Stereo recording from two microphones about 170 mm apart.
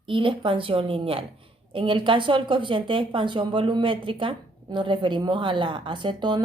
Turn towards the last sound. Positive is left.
turn(degrees=-25)  # may be behind; listen again after turning